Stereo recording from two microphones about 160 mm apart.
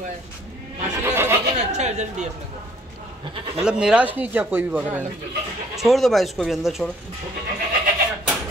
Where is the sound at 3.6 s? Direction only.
5° right (ahead or behind).